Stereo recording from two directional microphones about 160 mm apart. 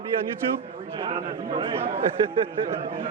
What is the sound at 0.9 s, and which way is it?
Speech, 35° right (ahead or behind).